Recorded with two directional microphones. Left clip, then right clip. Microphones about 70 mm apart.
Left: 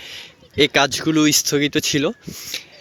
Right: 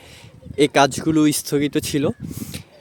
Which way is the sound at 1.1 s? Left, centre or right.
Right.